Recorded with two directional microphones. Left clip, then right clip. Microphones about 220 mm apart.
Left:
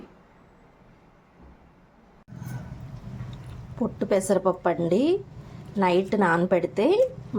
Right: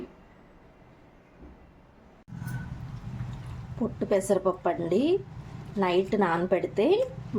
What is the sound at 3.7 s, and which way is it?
A woman's voice, 15° left (ahead or behind).